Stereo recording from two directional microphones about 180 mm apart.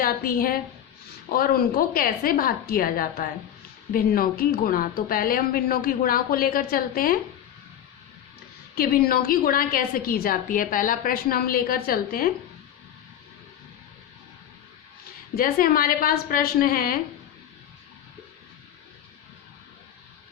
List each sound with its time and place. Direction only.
0.0 s a woman's voice: 55° left (ahead or behind)
8.7 s a woman's voice: 55° left (ahead or behind)
15.4 s a woman's voice: 55° left (ahead or behind)